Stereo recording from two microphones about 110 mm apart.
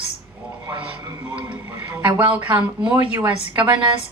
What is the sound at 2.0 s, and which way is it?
Speech, 15° right (ahead or behind).